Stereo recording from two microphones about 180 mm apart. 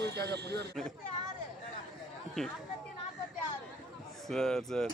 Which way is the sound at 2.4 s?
5° left (ahead or behind).